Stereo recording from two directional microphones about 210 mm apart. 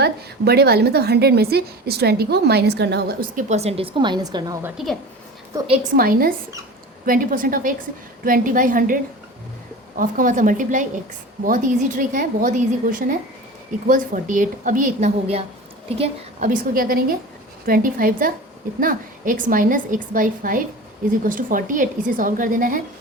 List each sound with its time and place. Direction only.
0.0 s a woman's voice: 50° right (ahead or behind); by 5.9 s 25° right (ahead or behind)
6.0 s a woman's voice: 45° right (ahead or behind)
10.0 s a woman's voice: 40° right (ahead or behind)